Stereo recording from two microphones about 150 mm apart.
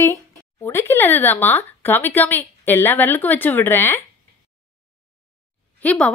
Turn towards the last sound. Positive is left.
turn(degrees=10)  # may be behind; listen again after turning